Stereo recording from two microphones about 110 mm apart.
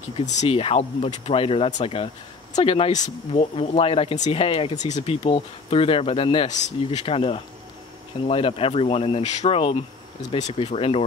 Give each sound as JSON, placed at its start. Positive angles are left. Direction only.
{"t": 0.2, "sound": "speech", "side_deg": 90}
{"t": 4.3, "sound": "speech", "side_deg": 60}
{"t": 4.8, "sound": "speech", "side_deg": 75}
{"t": 7.2, "sound": "speech", "side_deg": 60}
{"t": 10.3, "sound": "speech", "side_deg": 75}